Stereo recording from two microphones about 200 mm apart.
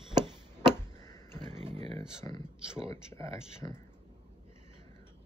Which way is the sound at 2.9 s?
15° left (ahead or behind).